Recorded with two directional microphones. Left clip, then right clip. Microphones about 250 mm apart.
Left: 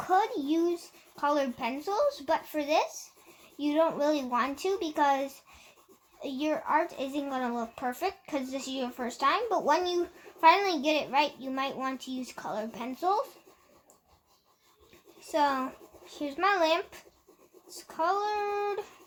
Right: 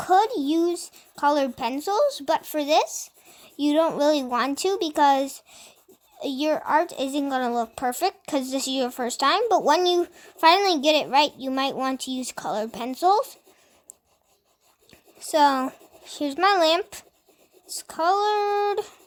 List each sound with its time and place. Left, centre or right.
0.0 s a woman's voice: right
14.8 s a child's voice: right